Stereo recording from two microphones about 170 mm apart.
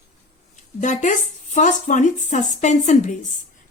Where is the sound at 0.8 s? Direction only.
45° left (ahead or behind).